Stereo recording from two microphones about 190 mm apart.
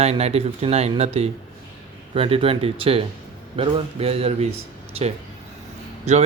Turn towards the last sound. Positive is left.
turn(degrees=-35)  # may be behind; listen again after turning